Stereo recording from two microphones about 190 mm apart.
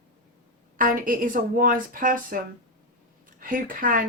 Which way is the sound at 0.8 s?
45° right (ahead or behind).